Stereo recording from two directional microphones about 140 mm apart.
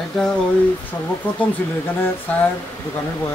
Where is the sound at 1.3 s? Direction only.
10° left (ahead or behind).